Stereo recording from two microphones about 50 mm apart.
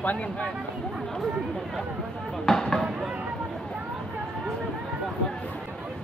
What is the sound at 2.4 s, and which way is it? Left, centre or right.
Speech, centre.